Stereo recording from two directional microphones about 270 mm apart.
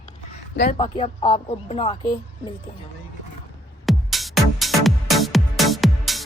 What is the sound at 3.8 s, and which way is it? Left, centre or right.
Music, centre.